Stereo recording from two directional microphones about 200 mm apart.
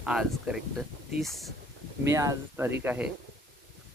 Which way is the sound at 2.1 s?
15° right (ahead or behind).